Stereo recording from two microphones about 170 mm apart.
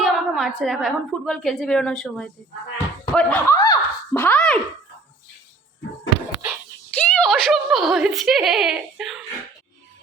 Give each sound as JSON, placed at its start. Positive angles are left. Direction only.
{"t": 0.0, "sound": "a woman's voice", "side_deg": 0}
{"t": 2.7, "sound": "a sound", "side_deg": 10}
{"t": 6.9, "sound": "speech", "side_deg": 10}